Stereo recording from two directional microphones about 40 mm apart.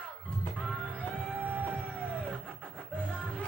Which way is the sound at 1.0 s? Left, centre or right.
Right.